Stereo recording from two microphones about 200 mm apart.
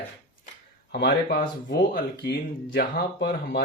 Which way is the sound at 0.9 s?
55° left (ahead or behind).